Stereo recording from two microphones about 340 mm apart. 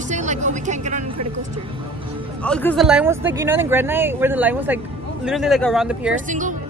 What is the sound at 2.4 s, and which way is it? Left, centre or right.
Speech, centre.